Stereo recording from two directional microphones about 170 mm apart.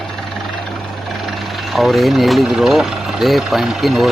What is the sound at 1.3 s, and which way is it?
Speech, centre (ahead or behind).